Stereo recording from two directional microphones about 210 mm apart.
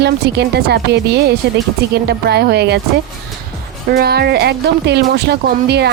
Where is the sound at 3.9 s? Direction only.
50° right (ahead or behind).